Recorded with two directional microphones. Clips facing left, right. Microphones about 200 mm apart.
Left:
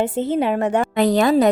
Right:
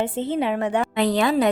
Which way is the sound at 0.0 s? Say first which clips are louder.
Left 4 dB; 40° left (ahead or behind).